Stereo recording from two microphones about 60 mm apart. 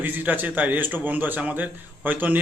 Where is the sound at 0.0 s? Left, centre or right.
Right.